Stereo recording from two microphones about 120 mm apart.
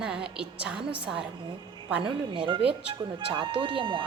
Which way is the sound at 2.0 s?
45° right (ahead or behind).